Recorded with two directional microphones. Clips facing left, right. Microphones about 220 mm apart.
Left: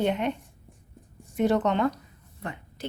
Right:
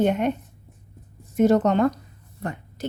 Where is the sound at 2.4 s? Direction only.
45° right (ahead or behind).